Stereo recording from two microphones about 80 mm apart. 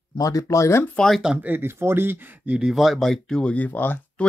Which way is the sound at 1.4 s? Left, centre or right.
Right.